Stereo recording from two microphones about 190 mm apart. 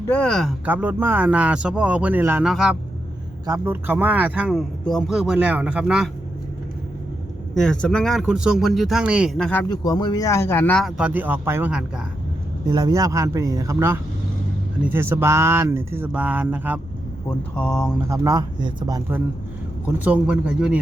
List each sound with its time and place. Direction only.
0.1 s speech: 5° left (ahead or behind)
0.6 s speech: 10° right (ahead or behind)
3.4 s speech: 15° right (ahead or behind)
7.5 s speech: 5° left (ahead or behind)
9.4 s speech: 10° left (ahead or behind)
9.6 s speech: 20° left (ahead or behind); by 11.9 s 5° right (ahead or behind)
12.6 s speech: 20° right (ahead or behind)
17.2 s speech: 5° left (ahead or behind)
18.1 s a man's voice: 15° right (ahead or behind)